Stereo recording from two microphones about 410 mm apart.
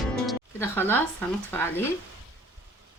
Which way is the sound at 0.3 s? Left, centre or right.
Centre.